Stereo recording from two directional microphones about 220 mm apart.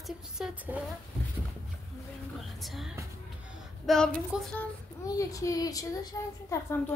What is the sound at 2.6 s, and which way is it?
Speech, centre (ahead or behind).